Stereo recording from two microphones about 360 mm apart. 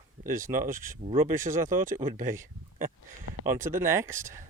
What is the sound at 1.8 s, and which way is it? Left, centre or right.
Speech, right.